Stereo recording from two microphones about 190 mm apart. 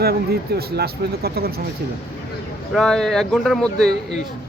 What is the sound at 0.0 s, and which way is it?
Speech, 55° right (ahead or behind).